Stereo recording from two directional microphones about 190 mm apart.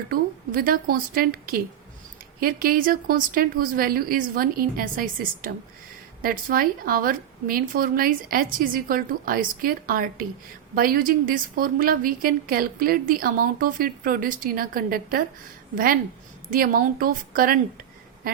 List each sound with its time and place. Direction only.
0.1 s a woman's voice: 50° right (ahead or behind)